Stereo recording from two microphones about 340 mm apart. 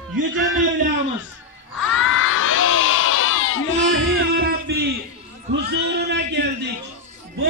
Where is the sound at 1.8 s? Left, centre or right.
Left.